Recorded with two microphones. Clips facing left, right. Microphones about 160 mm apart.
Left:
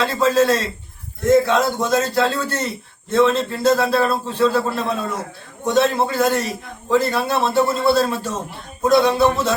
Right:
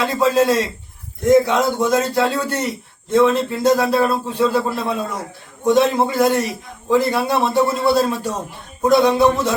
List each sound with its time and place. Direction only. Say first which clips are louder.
0.0 s a man's voice: even; 15° right (ahead or behind)